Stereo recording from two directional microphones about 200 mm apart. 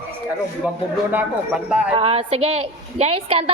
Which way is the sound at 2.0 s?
30° right (ahead or behind).